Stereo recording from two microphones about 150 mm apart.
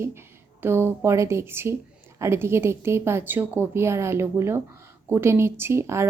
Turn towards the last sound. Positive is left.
turn(degrees=-20)  # may be behind; listen again after turning